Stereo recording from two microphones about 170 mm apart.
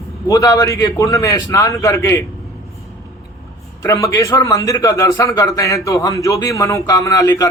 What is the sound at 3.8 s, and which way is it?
A man's voice, 20° left (ahead or behind).